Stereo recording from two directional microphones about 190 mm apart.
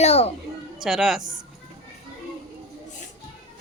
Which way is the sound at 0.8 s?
Centre (ahead or behind).